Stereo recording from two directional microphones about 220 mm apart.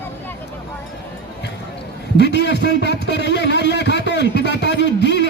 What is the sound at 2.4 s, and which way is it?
Speech, 50° left (ahead or behind).